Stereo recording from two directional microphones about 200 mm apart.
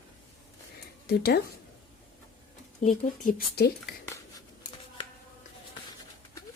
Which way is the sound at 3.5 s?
55° left (ahead or behind).